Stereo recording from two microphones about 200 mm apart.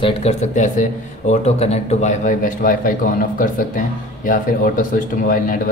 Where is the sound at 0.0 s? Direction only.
30° left (ahead or behind).